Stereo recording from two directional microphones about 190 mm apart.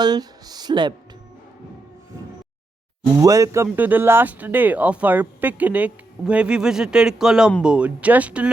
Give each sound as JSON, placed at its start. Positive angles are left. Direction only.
{"t": 0.0, "sound": "speech", "side_deg": -20}
{"t": 3.2, "sound": "speech", "side_deg": -15}